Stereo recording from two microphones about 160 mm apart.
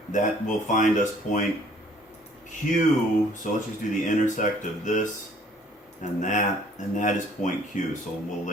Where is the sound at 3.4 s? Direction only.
50° left (ahead or behind).